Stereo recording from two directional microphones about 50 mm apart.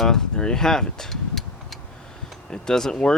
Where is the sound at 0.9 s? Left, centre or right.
Centre.